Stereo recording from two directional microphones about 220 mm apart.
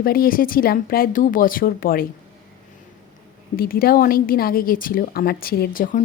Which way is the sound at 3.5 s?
45° left (ahead or behind).